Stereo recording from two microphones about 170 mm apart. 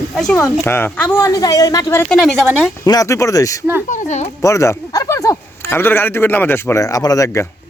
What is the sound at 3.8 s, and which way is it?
Speech, 45° left (ahead or behind).